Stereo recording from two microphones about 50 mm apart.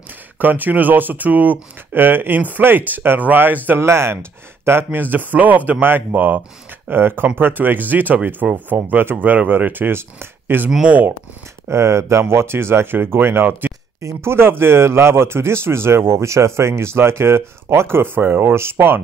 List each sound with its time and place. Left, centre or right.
0.4 s speech: right
3.8 s speech: right
4.6 s speech: right
5.0 s speech: right
6.9 s speech: right
11.7 s speech: right
13.5 s speech: right
14.0 s speech: right